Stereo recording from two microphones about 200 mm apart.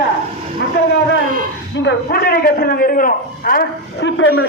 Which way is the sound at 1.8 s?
55° left (ahead or behind).